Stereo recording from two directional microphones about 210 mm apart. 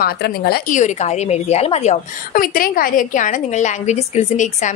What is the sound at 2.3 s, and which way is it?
A woman's voice, 45° left (ahead or behind).